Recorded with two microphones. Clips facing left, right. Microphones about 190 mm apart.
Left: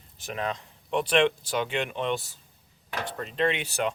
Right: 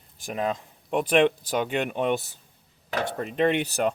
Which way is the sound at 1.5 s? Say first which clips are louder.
Right 3 dB; 50° right (ahead or behind).